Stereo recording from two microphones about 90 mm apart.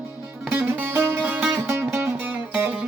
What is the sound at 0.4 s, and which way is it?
Music, 25° right (ahead or behind).